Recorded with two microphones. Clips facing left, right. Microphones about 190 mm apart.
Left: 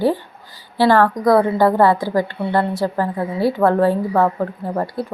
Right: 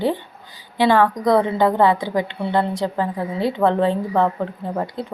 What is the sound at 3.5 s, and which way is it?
Speech, 5° left (ahead or behind).